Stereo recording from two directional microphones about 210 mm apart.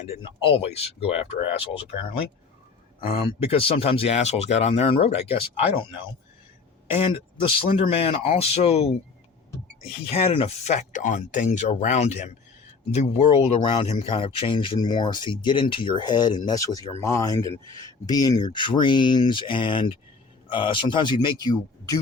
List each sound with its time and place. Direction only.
0.2 s speech: 25° left (ahead or behind)
3.4 s speech: 25° left (ahead or behind)
6.9 s speech: 25° left (ahead or behind)
10.1 s speech: 30° left (ahead or behind)